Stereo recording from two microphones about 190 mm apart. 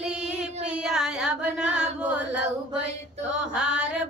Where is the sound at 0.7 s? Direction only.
5° right (ahead or behind).